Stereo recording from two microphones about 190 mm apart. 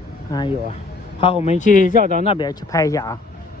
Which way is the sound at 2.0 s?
45° right (ahead or behind).